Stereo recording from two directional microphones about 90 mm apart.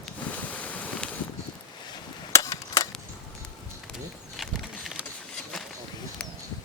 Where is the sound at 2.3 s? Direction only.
40° left (ahead or behind).